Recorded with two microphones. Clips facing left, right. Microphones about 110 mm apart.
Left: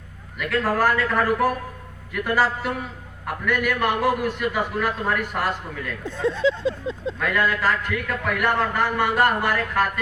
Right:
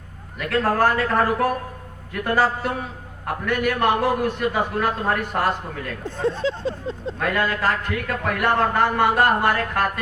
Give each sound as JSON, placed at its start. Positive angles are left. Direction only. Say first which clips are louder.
{"t": 0.3, "sound": "a man's voice", "louder": "right 2 dB", "side_deg": -30}